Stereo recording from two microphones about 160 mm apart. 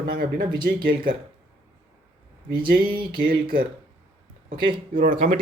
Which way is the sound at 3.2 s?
70° right (ahead or behind).